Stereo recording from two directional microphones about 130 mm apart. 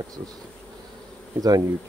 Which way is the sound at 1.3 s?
30° right (ahead or behind).